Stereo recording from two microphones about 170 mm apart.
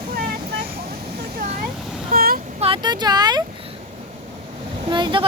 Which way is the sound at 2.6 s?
30° right (ahead or behind).